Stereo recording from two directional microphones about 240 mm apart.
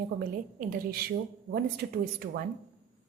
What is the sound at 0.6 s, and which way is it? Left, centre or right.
A woman's voice, right.